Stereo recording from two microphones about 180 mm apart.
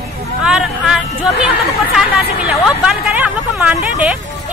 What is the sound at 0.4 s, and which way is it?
Chatter, 5° right (ahead or behind).